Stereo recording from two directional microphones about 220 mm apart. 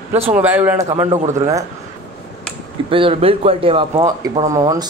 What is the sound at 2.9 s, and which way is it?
Speech, 25° right (ahead or behind).